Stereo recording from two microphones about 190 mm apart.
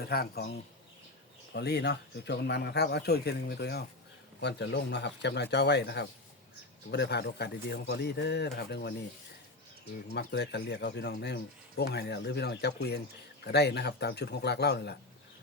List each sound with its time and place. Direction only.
0.1 s speech: 55° left (ahead or behind)
1.5 s speech: 60° left (ahead or behind)
10.1 s speech: 60° left (ahead or behind)